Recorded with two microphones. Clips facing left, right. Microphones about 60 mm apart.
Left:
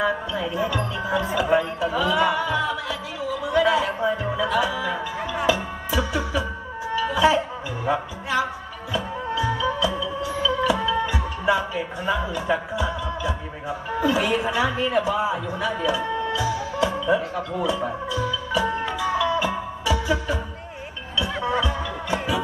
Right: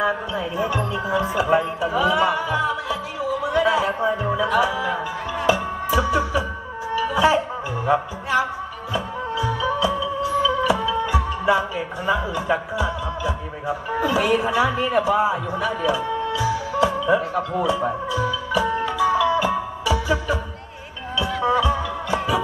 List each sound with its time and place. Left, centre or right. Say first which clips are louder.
0.0 s music: right 1 dB; right
14.4 s a man's voice: right 3 dB; right
16.7 s speech: right 3 dB; right
18.9 s music: right 5 dB; right
21.6 s music: right 4 dB; right